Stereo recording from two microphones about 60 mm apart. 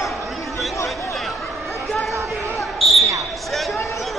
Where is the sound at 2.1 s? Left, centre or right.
Right.